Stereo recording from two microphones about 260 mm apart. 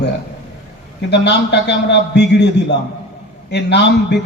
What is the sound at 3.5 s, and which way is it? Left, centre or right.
Speech, left.